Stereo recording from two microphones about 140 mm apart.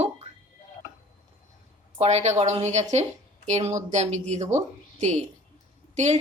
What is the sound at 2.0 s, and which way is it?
Speech, 55° right (ahead or behind).